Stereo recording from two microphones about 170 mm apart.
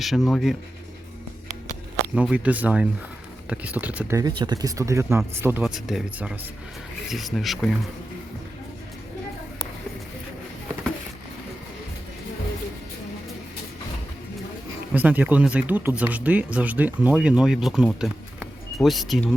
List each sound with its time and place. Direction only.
0.0 s speech: centre (ahead or behind)
2.1 s speech: 5° right (ahead or behind)
4.2 s speech: 25° right (ahead or behind); by 7.8 s centre (ahead or behind)
14.9 s speech: 10° right (ahead or behind)